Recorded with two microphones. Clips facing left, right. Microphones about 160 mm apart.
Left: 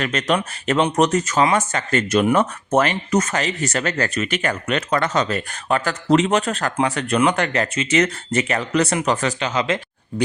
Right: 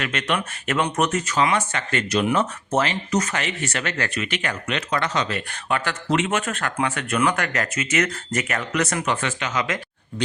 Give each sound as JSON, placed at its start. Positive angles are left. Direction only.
{"t": 0.0, "sound": "speech", "side_deg": 40}
{"t": 3.3, "sound": "speech", "side_deg": 40}